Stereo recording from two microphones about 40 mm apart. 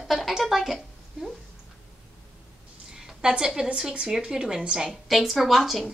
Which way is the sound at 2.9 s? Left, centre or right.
Centre.